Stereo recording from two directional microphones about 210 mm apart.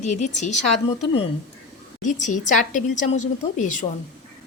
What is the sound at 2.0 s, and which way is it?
A woman's voice, 35° left (ahead or behind).